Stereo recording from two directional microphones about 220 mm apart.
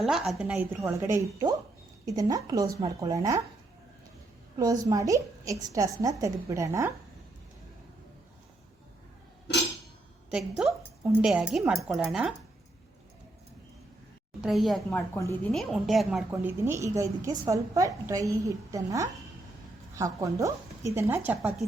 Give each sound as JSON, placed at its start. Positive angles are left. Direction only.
{"t": 0.0, "sound": "a woman's voice", "side_deg": 0}
{"t": 4.5, "sound": "a woman's voice", "side_deg": -15}
{"t": 10.6, "sound": "speech", "side_deg": -5}
{"t": 14.4, "sound": "a woman's voice", "side_deg": 0}